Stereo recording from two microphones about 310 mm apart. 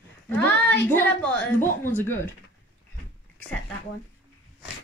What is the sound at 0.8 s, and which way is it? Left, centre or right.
A woman's voice, centre.